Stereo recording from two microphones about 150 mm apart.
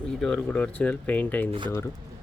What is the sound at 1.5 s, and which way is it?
Speech, 35° right (ahead or behind).